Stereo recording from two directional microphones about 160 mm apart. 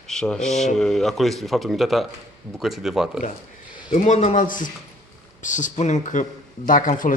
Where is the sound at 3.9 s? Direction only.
50° left (ahead or behind).